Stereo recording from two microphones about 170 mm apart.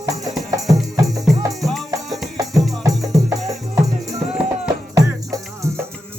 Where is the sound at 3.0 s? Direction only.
20° right (ahead or behind).